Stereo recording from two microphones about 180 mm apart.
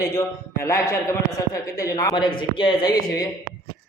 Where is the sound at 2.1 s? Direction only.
25° left (ahead or behind).